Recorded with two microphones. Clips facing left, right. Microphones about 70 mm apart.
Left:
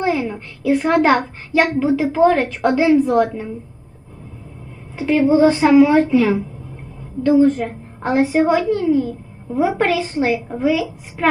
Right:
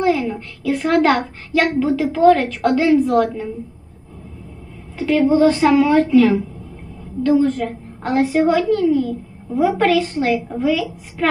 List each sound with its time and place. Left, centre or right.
0.0 s a sound: centre
1.8 s a woman's voice: centre
4.9 s a woman's voice: left